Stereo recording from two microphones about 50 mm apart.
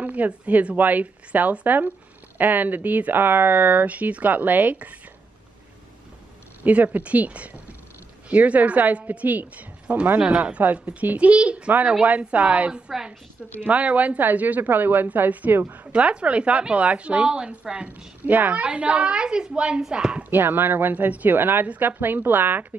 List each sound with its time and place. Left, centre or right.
0.0 s a woman's voice: right
6.6 s a woman's voice: right
15.9 s a woman's voice: right
18.2 s a woman's voice: right; by 20.2 s centre
20.2 s speech: right
20.9 s a woman's voice: right